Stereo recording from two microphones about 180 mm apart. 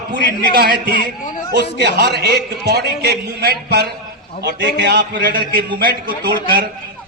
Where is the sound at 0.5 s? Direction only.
60° right (ahead or behind).